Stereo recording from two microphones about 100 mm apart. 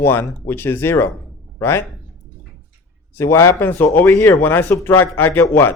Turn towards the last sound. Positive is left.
turn(degrees=25)  # may be behind; listen again after turning